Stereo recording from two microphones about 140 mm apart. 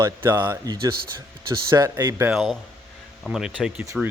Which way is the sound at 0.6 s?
30° right (ahead or behind).